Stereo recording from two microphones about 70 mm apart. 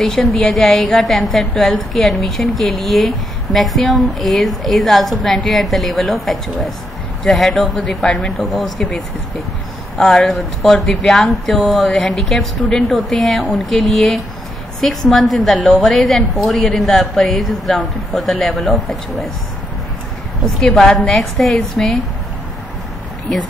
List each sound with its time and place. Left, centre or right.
0.0 s a woman's voice: centre
20.4 s a woman's voice: centre
20.8 s a woman's voice: centre
21.1 s a woman's voice: centre